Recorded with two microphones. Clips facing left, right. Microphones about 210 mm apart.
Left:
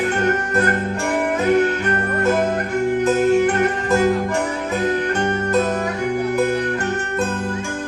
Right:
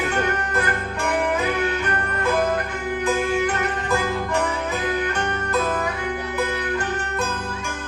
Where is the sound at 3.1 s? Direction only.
45° left (ahead or behind).